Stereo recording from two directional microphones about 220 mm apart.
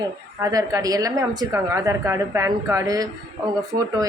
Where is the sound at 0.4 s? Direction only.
15° right (ahead or behind).